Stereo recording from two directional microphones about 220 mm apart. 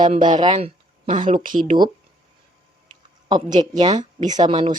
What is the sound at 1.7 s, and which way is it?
Speech, 20° right (ahead or behind).